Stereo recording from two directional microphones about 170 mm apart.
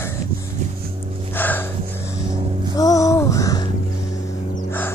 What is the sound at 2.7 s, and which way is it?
Music, 20° left (ahead or behind).